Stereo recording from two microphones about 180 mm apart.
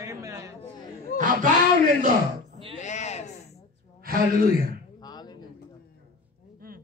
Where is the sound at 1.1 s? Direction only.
45° right (ahead or behind).